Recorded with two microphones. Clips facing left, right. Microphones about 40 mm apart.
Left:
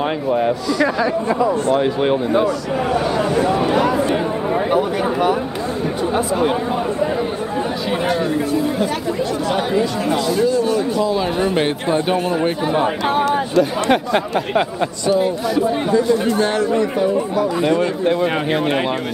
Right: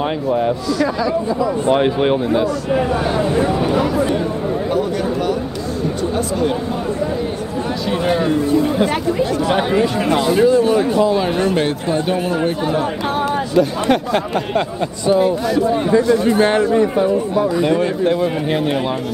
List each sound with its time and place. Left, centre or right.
0.0 s speech: centre
4.6 s speech: left
9.5 s speech: right
11.4 s speech: centre
13.3 s speech: centre
15.1 s speech: centre
16.3 s speech: right
17.6 s speech: centre